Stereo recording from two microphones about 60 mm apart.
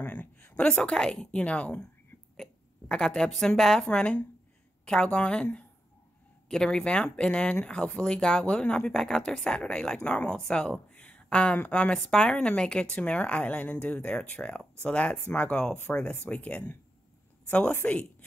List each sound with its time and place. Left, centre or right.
0.0 s a sound: left
0.7 s a woman's voice: centre
2.3 s a woman's voice: centre
3.8 s a woman's voice: centre
10.9 s a sound: left
11.6 s speech: left
12.0 s a woman's voice: centre